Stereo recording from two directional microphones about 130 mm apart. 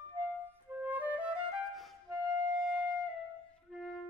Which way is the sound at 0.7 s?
15° right (ahead or behind).